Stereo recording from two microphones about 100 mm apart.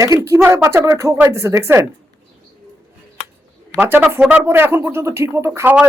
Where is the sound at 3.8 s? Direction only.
20° right (ahead or behind).